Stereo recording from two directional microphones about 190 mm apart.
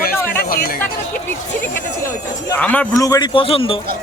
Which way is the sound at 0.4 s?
50° left (ahead or behind).